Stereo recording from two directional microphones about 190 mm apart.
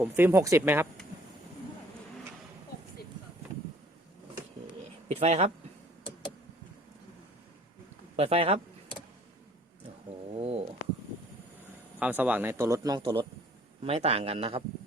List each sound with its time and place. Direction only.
0.0 s speech: 10° right (ahead or behind)
5.0 s a sound: 35° right (ahead or behind)
8.1 s speech: 30° right (ahead or behind)
10.3 s stomach rumble: 35° right (ahead or behind)
11.9 s speech: 10° right (ahead or behind); by 14.6 s 30° right (ahead or behind)